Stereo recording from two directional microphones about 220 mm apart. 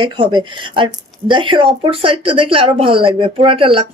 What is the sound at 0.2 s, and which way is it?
Speech, 20° right (ahead or behind).